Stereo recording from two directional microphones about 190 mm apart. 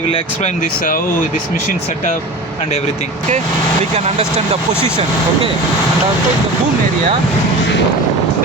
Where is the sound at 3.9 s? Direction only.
35° right (ahead or behind).